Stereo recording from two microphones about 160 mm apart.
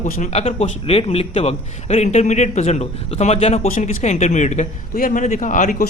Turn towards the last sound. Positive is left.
turn(degrees=55)  # may be behind; listen again after turning